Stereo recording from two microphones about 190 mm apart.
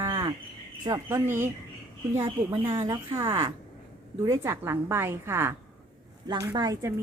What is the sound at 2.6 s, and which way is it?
A woman's voice, 15° right (ahead or behind).